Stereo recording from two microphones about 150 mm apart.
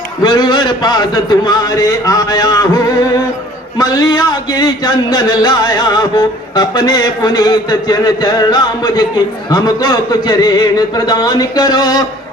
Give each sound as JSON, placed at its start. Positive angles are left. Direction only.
{"t": 0.2, "sound": "speech", "side_deg": 30}